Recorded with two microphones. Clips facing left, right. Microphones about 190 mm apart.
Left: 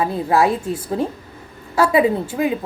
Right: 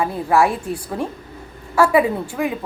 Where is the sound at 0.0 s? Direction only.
20° left (ahead or behind).